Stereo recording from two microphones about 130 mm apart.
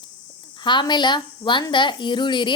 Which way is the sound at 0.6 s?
35° left (ahead or behind).